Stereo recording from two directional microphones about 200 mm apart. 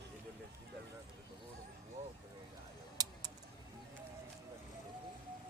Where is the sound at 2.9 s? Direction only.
20° right (ahead or behind).